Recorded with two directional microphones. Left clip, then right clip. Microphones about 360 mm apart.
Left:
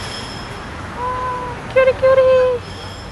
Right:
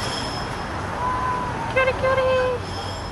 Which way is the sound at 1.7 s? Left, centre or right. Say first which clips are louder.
Left 9 dB; centre.